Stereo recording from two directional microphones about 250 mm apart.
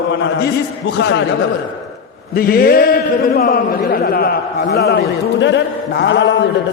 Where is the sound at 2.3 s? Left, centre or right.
Left.